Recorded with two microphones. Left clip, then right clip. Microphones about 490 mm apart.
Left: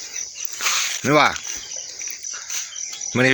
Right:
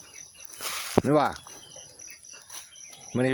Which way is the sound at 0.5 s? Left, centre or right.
Right.